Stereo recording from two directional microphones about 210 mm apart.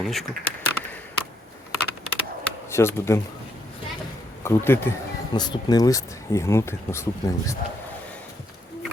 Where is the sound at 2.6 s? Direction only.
10° left (ahead or behind).